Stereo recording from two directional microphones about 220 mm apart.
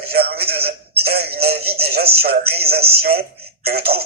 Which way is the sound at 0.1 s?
45° right (ahead or behind).